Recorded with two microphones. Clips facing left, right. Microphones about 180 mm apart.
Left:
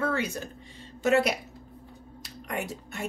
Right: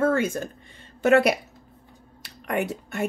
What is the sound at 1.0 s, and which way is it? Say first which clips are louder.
A woman's voice: right 5 dB; 60° right (ahead or behind).